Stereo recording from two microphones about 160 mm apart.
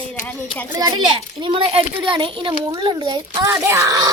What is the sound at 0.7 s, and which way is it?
A child's voice, 25° right (ahead or behind).